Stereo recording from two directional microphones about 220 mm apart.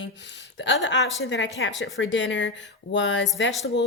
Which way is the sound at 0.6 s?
55° left (ahead or behind).